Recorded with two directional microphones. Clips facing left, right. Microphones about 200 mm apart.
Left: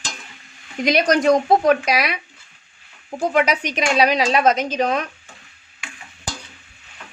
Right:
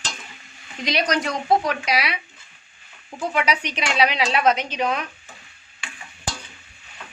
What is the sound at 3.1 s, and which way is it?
A woman's voice, 45° left (ahead or behind).